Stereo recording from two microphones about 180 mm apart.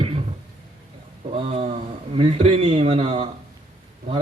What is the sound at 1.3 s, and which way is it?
Speech, 35° right (ahead or behind).